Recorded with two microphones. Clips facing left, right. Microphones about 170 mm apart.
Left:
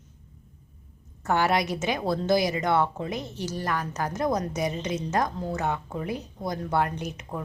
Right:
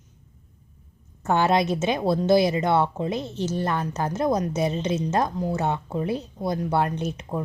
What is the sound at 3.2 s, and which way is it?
Speech, 15° left (ahead or behind).